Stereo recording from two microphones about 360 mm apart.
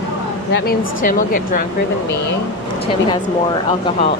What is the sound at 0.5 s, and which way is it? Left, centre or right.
Speech, left.